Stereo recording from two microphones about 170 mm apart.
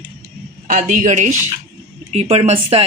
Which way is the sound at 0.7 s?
50° right (ahead or behind).